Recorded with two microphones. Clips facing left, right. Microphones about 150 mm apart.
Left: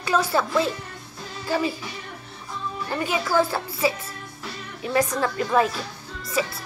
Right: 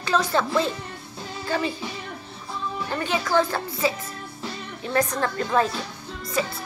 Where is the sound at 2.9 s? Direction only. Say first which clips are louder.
Even; 10° left (ahead or behind).